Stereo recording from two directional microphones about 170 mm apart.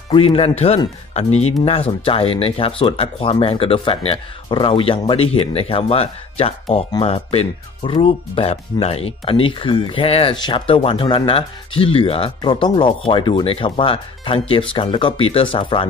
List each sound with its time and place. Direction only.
0.1 s speech: 30° left (ahead or behind)